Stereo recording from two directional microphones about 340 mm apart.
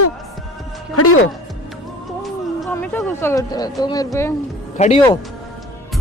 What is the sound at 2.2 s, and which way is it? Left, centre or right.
Speech, centre.